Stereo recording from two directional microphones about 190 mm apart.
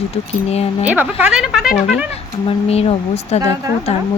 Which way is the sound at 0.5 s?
35° left (ahead or behind).